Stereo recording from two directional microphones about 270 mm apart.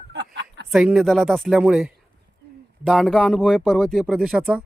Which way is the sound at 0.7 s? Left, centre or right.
Centre.